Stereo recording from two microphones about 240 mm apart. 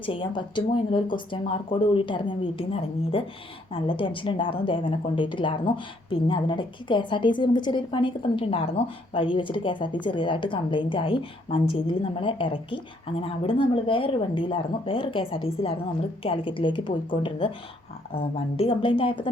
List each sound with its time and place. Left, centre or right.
0.0 s a woman's voice: left
3.7 s a woman's voice: left